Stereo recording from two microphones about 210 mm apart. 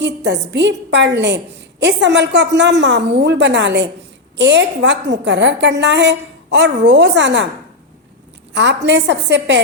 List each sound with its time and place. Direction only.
0.0 s a woman's voice: 55° right (ahead or behind)
8.5 s a woman's voice: 55° right (ahead or behind)